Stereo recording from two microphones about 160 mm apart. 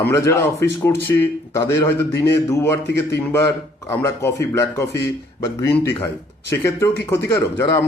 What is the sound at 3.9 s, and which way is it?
Speech, 15° left (ahead or behind).